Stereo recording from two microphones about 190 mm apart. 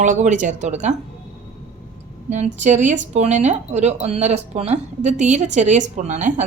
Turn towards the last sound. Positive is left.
turn(degrees=-40)  # may be behind; listen again after turning